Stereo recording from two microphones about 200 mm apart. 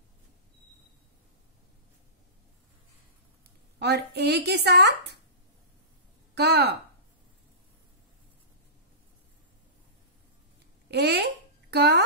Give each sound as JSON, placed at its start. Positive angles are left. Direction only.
{"t": 3.8, "sound": "a woman's voice", "side_deg": -55}
{"t": 6.3, "sound": "a woman's voice", "side_deg": -55}
{"t": 10.9, "sound": "a child's voice", "side_deg": -55}